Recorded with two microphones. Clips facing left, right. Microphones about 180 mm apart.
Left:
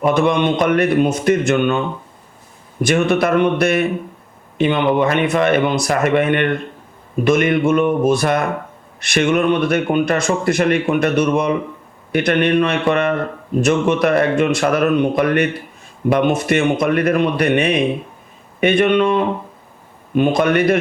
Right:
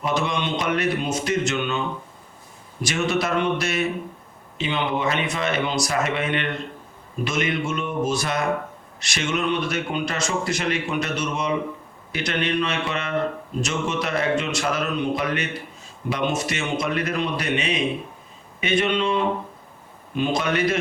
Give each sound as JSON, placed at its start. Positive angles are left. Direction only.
{"t": 0.0, "sound": "speech", "side_deg": 55}
{"t": 2.8, "sound": "speech", "side_deg": 55}